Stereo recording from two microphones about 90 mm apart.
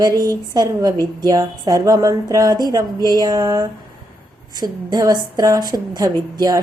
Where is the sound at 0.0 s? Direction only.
45° right (ahead or behind).